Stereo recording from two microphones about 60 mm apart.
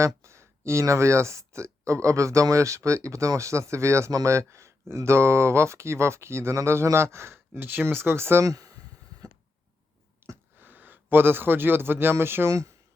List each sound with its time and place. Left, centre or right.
0.0 s speech: right
8.4 s speech: right
10.2 s a sound: right
12.1 s speech: right